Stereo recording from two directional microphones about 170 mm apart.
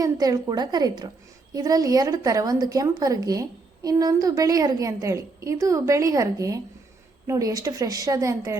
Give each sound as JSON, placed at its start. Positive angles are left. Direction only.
{"t": 0.0, "sound": "a woman's voice", "side_deg": -20}